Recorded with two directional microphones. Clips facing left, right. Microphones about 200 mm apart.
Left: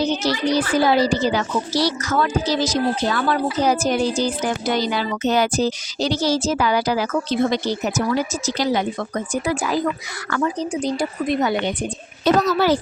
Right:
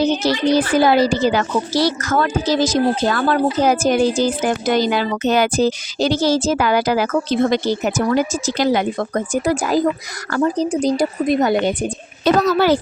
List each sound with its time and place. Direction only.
0.7 s a woman's voice: 55° right (ahead or behind)
12.2 s a woman's voice: 60° right (ahead or behind)